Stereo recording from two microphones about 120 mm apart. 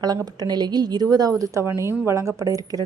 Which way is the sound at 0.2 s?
35° right (ahead or behind).